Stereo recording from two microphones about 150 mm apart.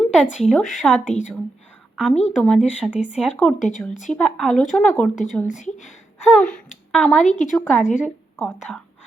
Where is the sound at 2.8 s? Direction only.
5° right (ahead or behind).